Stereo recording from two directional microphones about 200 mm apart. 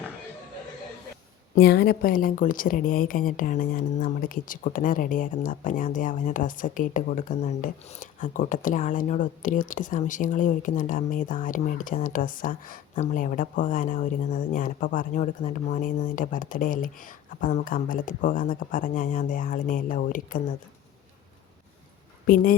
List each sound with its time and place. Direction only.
1.5 s a woman's voice: 50° left (ahead or behind)
22.3 s speech: 45° left (ahead or behind)